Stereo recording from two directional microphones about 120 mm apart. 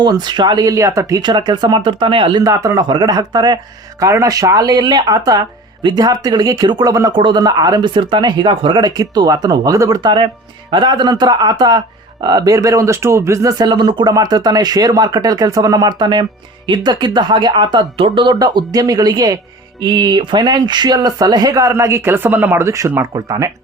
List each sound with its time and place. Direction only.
0.0 s speech: 35° right (ahead or behind)
1.2 s speech: 35° right (ahead or behind)
2.4 s speech: 30° right (ahead or behind)
7.1 s speech: 40° right (ahead or behind)